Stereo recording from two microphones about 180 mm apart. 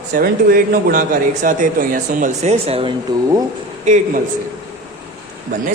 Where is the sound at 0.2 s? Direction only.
55° right (ahead or behind).